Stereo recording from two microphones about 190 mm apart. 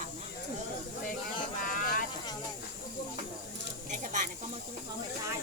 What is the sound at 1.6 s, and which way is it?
Vehicle, 45° left (ahead or behind).